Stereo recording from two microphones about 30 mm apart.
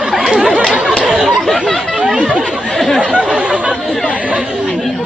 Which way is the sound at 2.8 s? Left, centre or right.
Centre.